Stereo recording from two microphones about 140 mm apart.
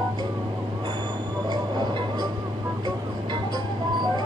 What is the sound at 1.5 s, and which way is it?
Music, 30° right (ahead or behind).